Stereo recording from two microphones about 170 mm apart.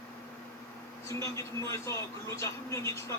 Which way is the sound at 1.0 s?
15° left (ahead or behind).